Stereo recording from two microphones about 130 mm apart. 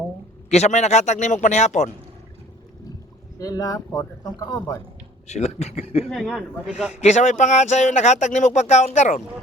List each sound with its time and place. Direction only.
0.5 s speech: 60° left (ahead or behind)
3.3 s speech: 25° left (ahead or behind)
5.3 s speech: 55° left (ahead or behind)
6.1 s a man's voice: centre (ahead or behind)
7.0 s speech: 65° left (ahead or behind)